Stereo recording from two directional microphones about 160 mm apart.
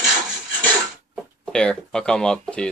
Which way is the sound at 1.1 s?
5° left (ahead or behind).